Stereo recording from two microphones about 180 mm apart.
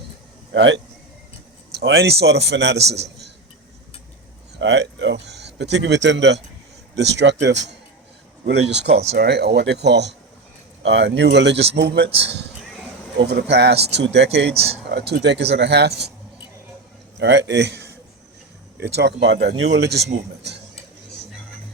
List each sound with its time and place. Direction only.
0.5 s a man's voice: 90° right
1.7 s speech: 80° right
4.5 s speech: 75° right (ahead or behind)
8.9 s speech: 35° right (ahead or behind)
9.1 s speech: 65° right (ahead or behind)
11.8 s speech: 65° right (ahead or behind)
14.5 s speech: 35° right (ahead or behind)
14.8 s speech: 65° right (ahead or behind)
17.2 s speech: 75° right (ahead or behind)